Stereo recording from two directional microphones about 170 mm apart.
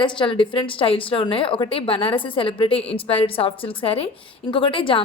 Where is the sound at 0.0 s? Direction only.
30° left (ahead or behind).